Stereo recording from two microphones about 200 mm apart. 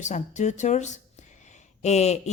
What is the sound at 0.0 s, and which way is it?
Speech, 35° left (ahead or behind).